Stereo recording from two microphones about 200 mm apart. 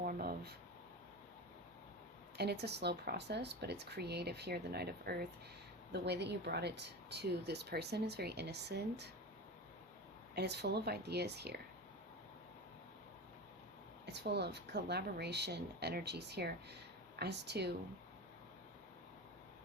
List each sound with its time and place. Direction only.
0.0 s a sound: 45° right (ahead or behind)
2.4 s speech: 55° right (ahead or behind)
10.3 s speech: 55° right (ahead or behind)
14.1 s speech: 55° right (ahead or behind)